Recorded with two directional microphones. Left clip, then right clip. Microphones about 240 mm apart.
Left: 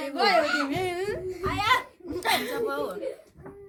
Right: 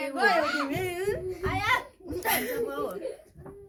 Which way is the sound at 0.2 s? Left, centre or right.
Centre.